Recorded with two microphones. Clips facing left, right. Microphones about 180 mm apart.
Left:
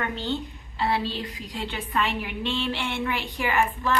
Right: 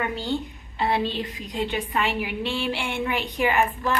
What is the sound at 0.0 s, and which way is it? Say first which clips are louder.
A woman's voice: right 2 dB; 10° right (ahead or behind).